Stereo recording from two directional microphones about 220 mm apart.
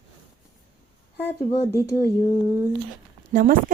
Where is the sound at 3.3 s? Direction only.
40° right (ahead or behind).